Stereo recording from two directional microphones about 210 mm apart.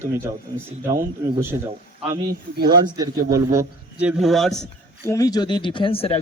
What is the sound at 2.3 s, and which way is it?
Speech, 50° right (ahead or behind).